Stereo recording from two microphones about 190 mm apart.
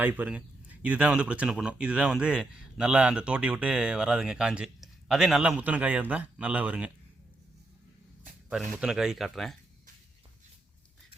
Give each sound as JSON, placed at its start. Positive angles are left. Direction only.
{"t": 0.0, "sound": "speech", "side_deg": -10}
{"t": 8.4, "sound": "speech", "side_deg": -5}